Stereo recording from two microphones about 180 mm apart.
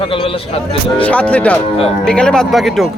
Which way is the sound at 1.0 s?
5° left (ahead or behind).